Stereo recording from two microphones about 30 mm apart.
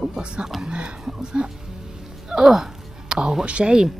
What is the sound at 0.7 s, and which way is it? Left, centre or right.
Speech, right.